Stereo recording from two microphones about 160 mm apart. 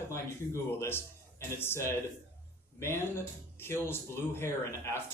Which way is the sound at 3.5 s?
15° left (ahead or behind).